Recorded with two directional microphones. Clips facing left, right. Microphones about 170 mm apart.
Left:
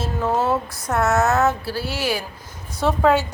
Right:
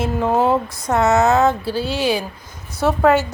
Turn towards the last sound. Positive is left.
turn(degrees=-5)  # may be behind; listen again after turning